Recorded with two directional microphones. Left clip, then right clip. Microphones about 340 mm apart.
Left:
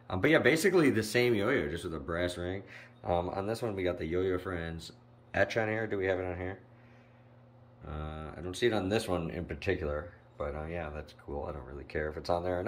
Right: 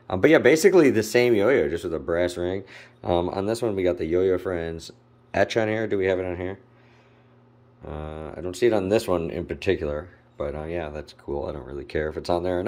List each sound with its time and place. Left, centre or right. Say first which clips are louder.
0.0 s speech: right 9 dB; centre
7.8 s speech: right 8 dB; centre